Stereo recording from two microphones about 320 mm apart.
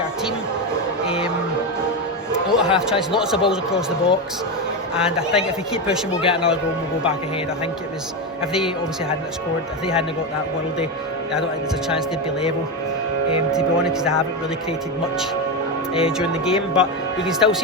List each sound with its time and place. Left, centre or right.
1.0 s music: centre
2.6 s a sound: centre
3.1 s speech: centre
5.3 s speech: centre
6.2 s speech: centre
9.8 s speech: centre
11.9 s speech: centre
16.0 s speech: centre